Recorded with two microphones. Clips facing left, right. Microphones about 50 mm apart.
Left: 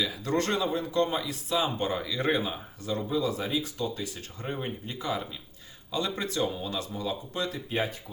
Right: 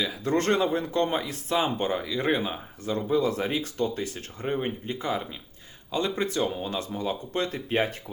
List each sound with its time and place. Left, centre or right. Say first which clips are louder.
0.0 s speech: right 3 dB; right
3.2 s speech: right 2 dB; right
4.4 s speech: right 5 dB; right